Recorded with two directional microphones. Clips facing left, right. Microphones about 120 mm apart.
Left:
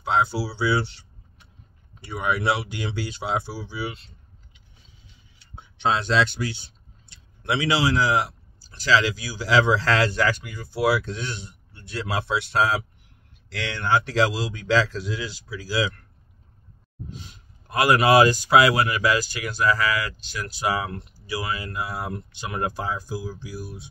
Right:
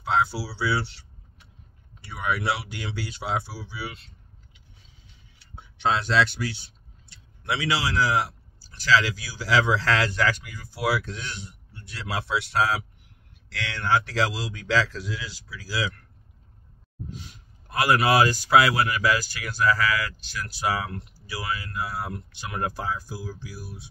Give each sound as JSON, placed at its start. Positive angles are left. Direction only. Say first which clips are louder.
{"t": 0.0, "sound": "speech", "louder": "left 2 dB", "side_deg": 20}
{"t": 5.6, "sound": "speech", "louder": "left 1 dB", "side_deg": 20}
{"t": 17.3, "sound": "speech", "louder": "left 3 dB", "side_deg": 20}